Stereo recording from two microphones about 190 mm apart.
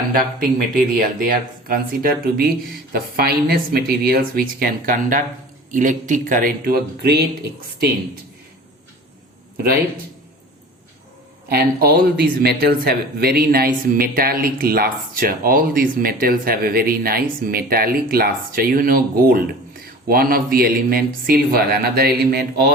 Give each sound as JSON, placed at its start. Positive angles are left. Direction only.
{"t": 0.1, "sound": "speech", "side_deg": -45}
{"t": 11.4, "sound": "speech", "side_deg": -55}